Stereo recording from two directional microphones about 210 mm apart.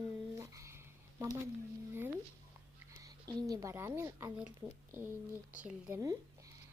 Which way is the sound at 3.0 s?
15° right (ahead or behind).